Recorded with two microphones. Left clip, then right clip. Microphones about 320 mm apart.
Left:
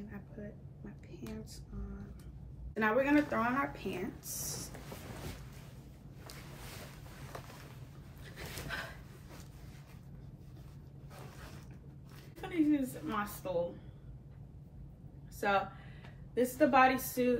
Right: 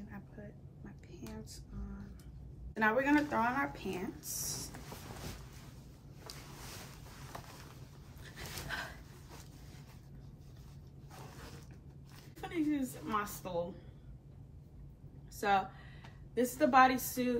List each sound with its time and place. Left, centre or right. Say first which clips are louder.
0.1 s a sound: left 3 dB; centre
2.7 s speech: even; centre
8.4 s dog: even; centre
12.4 s a sound: left 4 dB; centre
13.0 s a woman's voice: even; centre
15.4 s a woman's voice: even; centre